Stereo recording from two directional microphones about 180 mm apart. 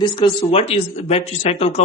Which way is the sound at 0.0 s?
25° left (ahead or behind).